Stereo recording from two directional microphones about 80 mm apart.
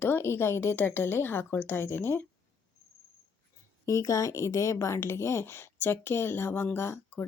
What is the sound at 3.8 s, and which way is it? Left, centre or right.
A woman's voice, left.